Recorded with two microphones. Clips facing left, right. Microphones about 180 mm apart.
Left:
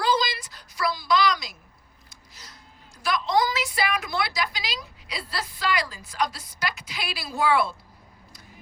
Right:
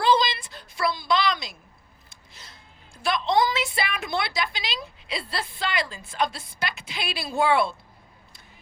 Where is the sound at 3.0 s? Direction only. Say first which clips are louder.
Right 1 dB; 25° right (ahead or behind).